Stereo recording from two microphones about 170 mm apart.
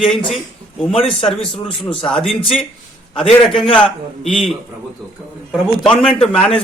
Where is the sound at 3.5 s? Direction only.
5° left (ahead or behind).